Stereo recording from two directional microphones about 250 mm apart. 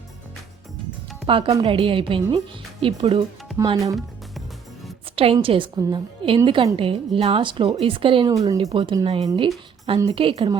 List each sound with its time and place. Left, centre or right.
1.3 s a woman's voice: centre
5.1 s a woman's voice: right